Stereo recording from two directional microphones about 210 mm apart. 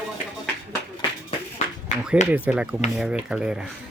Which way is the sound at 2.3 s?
5° right (ahead or behind).